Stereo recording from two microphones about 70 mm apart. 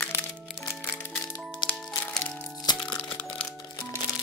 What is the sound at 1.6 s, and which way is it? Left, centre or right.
Music, left.